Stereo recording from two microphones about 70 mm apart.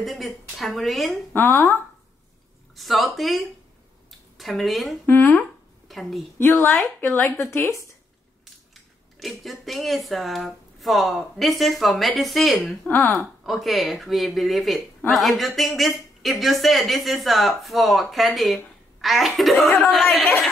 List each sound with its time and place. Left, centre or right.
0.0 s speech: centre
1.3 s speech: left
2.7 s speech: centre
5.0 s speech: left
5.9 s a woman's voice: centre
6.3 s speech: left
9.2 s speech: centre